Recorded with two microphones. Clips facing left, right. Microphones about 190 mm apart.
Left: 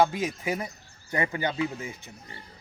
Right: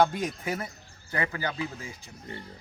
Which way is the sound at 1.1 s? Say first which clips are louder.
Left 3 dB; 20° left (ahead or behind).